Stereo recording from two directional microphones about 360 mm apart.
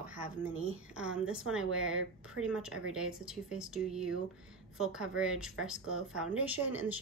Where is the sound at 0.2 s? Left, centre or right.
Right.